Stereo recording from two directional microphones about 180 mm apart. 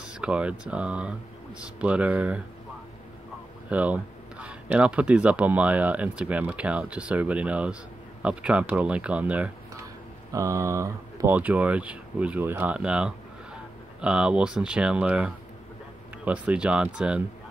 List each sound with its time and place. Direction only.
0.0 s speech: 5° right (ahead or behind)
3.6 s speech: 10° right (ahead or behind)